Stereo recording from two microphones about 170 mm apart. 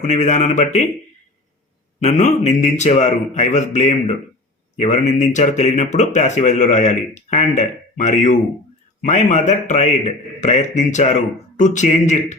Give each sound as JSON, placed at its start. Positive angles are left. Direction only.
{"t": 0.0, "sound": "speech", "side_deg": 45}
{"t": 2.0, "sound": "speech", "side_deg": 45}